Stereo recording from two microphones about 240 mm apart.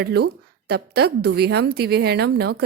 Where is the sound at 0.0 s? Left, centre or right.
Right.